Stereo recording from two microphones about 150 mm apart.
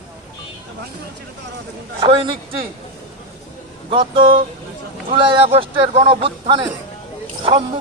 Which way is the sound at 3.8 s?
35° right (ahead or behind).